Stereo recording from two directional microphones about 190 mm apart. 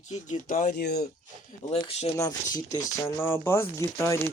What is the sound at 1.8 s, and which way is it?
Speech, 30° left (ahead or behind).